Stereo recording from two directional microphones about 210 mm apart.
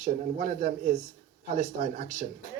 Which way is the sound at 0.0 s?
40° right (ahead or behind).